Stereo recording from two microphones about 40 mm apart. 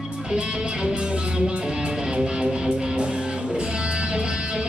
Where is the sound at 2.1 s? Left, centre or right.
Right.